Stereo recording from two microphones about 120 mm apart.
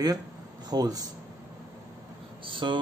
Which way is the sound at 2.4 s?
45° right (ahead or behind).